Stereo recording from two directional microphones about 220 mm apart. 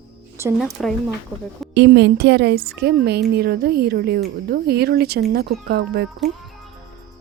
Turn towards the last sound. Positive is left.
turn(degrees=-45)  # may be behind; listen again after turning